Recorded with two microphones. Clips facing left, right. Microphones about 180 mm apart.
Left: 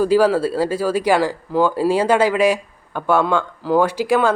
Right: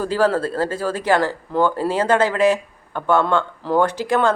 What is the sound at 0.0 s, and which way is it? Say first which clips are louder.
Speech: left 4 dB; 10° left (ahead or behind).